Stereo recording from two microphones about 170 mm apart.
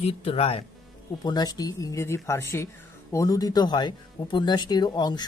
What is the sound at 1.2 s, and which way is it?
Speech, 25° left (ahead or behind).